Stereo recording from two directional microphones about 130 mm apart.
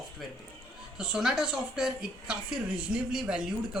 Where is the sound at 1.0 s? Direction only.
5° right (ahead or behind).